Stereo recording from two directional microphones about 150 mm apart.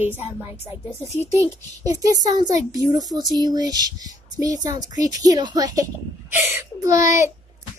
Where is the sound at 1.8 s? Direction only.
25° right (ahead or behind).